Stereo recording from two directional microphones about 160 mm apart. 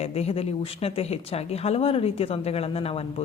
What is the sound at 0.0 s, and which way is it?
A woman's voice, 40° left (ahead or behind).